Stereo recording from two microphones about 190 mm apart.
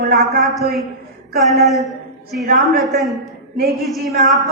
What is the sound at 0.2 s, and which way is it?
Speech, centre (ahead or behind).